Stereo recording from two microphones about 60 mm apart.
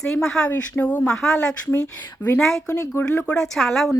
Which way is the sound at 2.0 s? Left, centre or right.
Left.